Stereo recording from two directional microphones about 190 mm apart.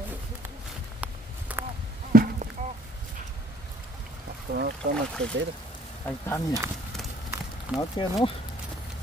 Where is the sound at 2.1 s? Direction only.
50° right (ahead or behind).